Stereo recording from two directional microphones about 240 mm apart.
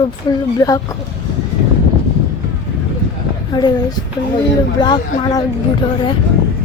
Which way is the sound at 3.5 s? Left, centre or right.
Centre.